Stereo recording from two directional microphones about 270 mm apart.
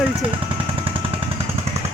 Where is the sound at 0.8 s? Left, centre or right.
Centre.